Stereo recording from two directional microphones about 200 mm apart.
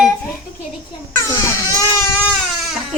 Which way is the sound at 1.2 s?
15° left (ahead or behind).